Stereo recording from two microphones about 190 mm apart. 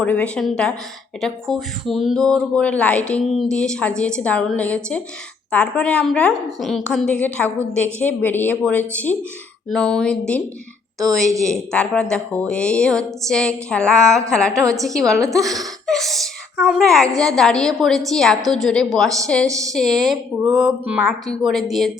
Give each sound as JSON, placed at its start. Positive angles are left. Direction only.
{"t": 0.0, "sound": "a woman's voice", "side_deg": 5}
{"t": 11.3, "sound": "speech", "side_deg": -15}
{"t": 11.5, "sound": "a woman's voice", "side_deg": 5}